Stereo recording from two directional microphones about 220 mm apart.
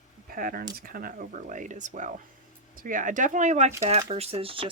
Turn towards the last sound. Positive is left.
turn(degrees=-25)  # may be behind; listen again after turning